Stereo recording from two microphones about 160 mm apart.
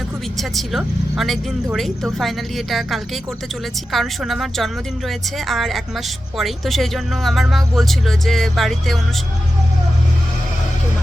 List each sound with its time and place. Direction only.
0.3 s speech: centre (ahead or behind)